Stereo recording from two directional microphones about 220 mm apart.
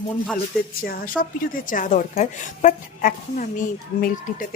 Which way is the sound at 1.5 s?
35° left (ahead or behind).